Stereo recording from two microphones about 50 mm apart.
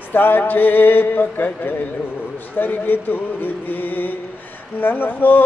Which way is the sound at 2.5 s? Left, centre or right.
Left.